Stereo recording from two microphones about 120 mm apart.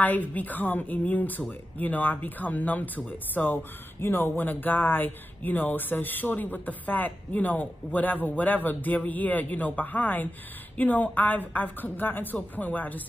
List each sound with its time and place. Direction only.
0.0 s speech: 15° left (ahead or behind)